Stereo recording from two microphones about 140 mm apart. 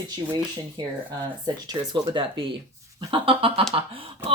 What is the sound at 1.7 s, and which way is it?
Speech, 35° right (ahead or behind).